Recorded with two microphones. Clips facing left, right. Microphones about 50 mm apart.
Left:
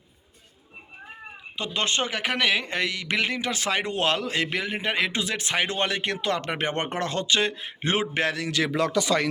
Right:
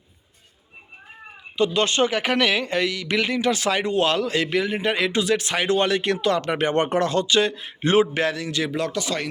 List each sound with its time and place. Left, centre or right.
1.5 s a man's voice: centre
2.0 s speech: centre
2.6 s a man's voice: left
3.8 s a man's voice: left
8.2 s a man's voice: left
8.4 s speech: left